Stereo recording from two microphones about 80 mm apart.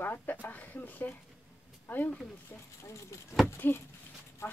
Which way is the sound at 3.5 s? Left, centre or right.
Left.